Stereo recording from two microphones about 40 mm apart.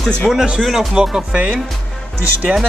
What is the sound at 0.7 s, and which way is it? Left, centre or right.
Speech, centre.